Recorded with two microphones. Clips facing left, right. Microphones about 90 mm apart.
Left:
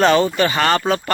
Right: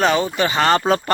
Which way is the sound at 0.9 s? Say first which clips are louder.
Right 1 dB; 35° right (ahead or behind).